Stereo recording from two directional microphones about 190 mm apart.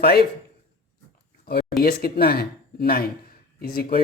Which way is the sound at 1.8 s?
55° left (ahead or behind).